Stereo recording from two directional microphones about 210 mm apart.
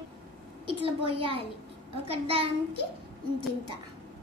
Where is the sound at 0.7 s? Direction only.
25° right (ahead or behind).